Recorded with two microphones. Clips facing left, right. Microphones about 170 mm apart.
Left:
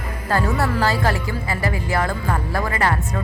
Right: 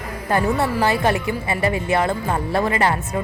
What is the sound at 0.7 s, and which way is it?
Speech, 20° right (ahead or behind).